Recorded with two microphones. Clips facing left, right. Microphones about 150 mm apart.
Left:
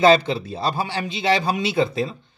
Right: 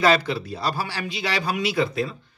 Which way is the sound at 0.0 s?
25° left (ahead or behind).